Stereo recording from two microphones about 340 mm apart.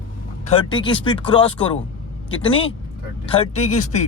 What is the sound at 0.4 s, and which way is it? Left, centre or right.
Speech, centre.